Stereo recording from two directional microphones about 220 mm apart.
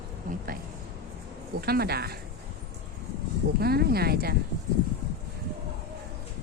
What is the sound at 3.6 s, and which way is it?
Speech, 45° right (ahead or behind).